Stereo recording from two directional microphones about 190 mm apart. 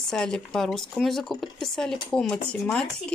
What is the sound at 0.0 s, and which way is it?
Speech, 5° left (ahead or behind).